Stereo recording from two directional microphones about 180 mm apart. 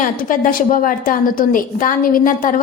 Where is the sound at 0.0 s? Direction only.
50° left (ahead or behind).